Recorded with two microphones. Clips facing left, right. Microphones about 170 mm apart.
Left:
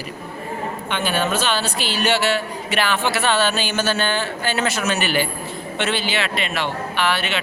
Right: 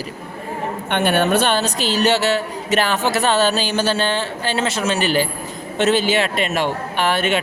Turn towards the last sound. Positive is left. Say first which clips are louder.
# right 4 dB
turn(degrees=-45)  # may be behind; listen again after turning